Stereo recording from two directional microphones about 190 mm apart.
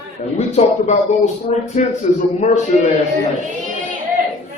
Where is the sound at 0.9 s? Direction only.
35° left (ahead or behind).